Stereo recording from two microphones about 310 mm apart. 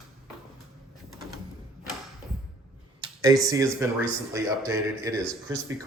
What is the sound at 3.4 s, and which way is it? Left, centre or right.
Speech, centre.